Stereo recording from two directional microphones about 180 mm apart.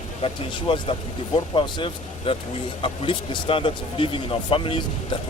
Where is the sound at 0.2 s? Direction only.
30° left (ahead or behind).